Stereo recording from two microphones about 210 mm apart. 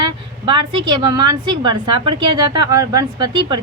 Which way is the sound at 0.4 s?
20° right (ahead or behind).